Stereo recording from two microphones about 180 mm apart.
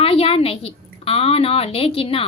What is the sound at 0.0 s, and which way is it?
A woman's voice, 30° left (ahead or behind).